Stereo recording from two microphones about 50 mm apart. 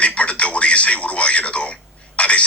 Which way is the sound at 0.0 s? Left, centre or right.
Left.